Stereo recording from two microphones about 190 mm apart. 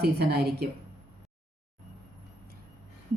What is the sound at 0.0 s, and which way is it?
Speech, 60° right (ahead or behind).